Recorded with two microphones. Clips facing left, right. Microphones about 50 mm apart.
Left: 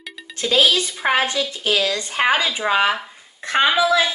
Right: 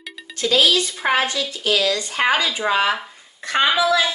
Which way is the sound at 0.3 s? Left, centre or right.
Left.